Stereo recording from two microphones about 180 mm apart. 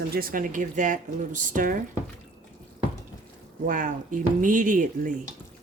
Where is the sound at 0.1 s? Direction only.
55° right (ahead or behind).